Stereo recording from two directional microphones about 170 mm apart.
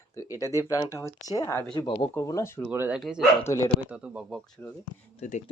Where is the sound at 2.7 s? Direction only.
10° right (ahead or behind).